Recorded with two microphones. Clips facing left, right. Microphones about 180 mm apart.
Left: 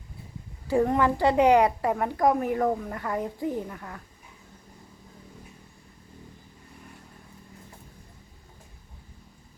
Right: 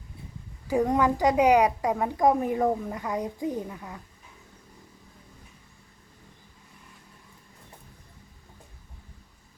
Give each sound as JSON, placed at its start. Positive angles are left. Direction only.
{"t": 0.7, "sound": "a woman's voice", "side_deg": -15}
{"t": 2.6, "sound": "speech", "side_deg": -5}
{"t": 2.9, "sound": "a woman's voice", "side_deg": -15}